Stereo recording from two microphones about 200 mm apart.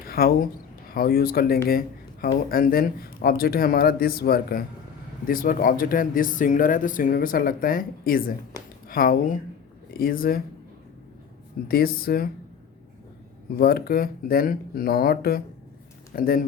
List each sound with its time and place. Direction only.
0.0 s speech: 45° left (ahead or behind)
11.7 s speech: 50° left (ahead or behind)
13.6 s speech: 50° left (ahead or behind)